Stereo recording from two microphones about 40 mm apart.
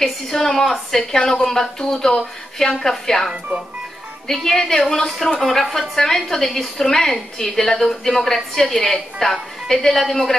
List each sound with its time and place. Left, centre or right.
0.0 s a woman's voice: centre
4.3 s a woman's voice: centre